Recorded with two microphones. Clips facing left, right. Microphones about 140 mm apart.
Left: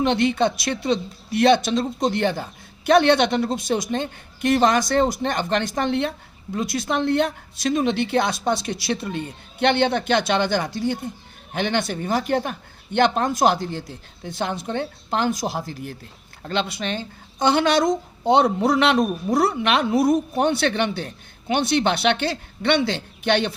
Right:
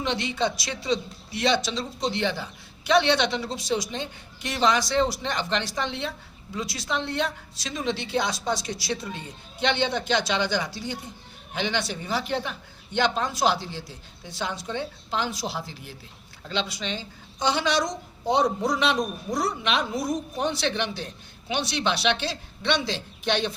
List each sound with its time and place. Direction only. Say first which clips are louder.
0.0 s speech: left 7 dB; 55° left (ahead or behind)